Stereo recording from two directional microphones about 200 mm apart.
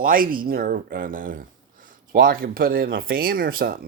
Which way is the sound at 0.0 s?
45° right (ahead or behind).